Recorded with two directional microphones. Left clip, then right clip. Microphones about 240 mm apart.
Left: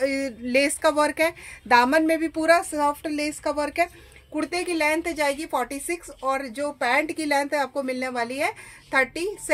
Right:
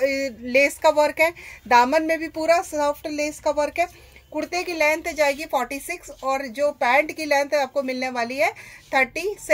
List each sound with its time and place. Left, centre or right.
0.0 s a woman's voice: left